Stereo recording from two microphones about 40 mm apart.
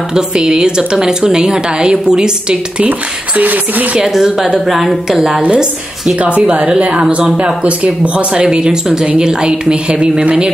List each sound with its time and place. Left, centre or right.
0.1 s a woman's voice: centre
2.8 s speech: right
4.1 s a woman's voice: centre
5.4 s a woman's voice: right